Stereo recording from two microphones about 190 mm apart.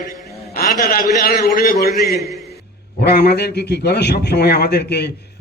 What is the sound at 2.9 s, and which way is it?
A man's voice, 60° left (ahead or behind).